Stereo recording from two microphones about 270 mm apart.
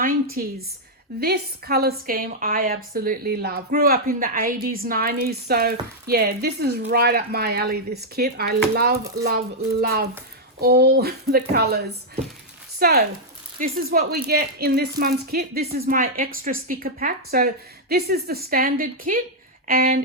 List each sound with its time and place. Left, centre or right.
0.4 s a woman's voice: right